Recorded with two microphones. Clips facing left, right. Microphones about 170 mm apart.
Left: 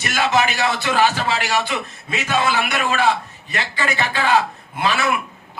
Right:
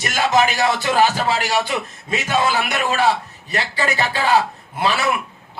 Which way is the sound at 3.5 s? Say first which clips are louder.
Right 2 dB; 35° right (ahead or behind).